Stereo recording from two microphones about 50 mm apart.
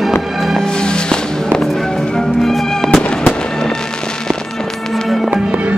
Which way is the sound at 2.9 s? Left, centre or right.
Centre.